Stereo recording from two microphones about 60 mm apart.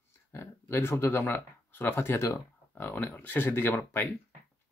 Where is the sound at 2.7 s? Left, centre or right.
Left.